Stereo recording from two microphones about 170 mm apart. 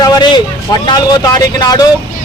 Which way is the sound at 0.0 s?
25° left (ahead or behind).